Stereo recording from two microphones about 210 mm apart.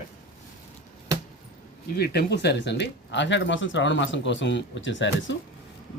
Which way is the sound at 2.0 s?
50° left (ahead or behind).